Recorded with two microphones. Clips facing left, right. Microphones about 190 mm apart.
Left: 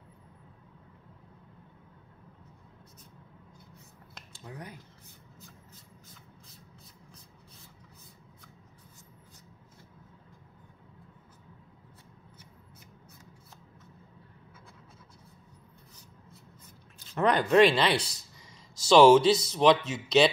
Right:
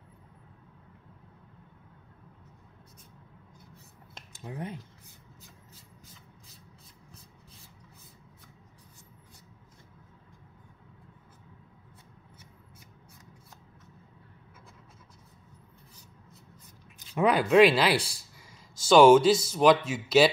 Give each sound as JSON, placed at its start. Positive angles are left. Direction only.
{"t": 4.4, "sound": "speech", "side_deg": -25}
{"t": 17.1, "sound": "speech", "side_deg": -5}